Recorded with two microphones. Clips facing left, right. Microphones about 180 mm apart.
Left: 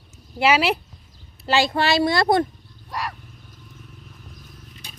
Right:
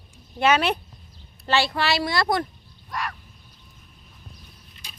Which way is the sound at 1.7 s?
25° left (ahead or behind).